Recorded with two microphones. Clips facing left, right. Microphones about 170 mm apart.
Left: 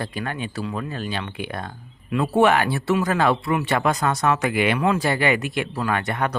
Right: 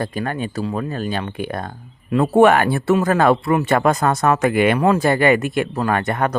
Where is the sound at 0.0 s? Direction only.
45° right (ahead or behind).